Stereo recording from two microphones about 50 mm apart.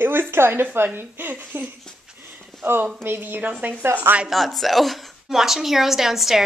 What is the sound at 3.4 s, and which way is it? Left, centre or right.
Speech, right.